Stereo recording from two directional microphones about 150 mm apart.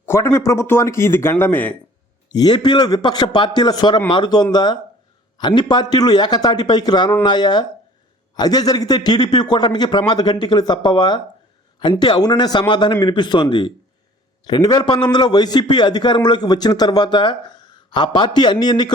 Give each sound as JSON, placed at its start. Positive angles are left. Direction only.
{"t": 0.0, "sound": "a man's voice", "side_deg": 15}
{"t": 2.3, "sound": "a man's voice", "side_deg": 25}